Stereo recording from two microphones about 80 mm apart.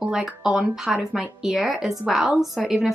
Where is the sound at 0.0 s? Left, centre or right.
Centre.